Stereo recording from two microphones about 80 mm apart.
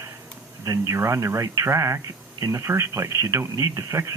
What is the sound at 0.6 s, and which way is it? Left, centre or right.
Speech, right.